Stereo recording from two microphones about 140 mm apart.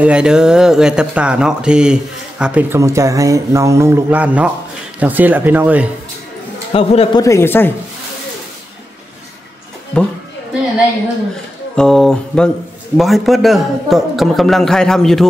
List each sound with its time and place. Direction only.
0.0 s speech: 5° right (ahead or behind)
2.8 s speech: 20° right (ahead or behind)
6.7 s a man's voice: 45° left (ahead or behind)
7.2 s speech: 20° left (ahead or behind)
9.9 s speech: 10° left (ahead or behind)
11.7 s speech: 5° left (ahead or behind)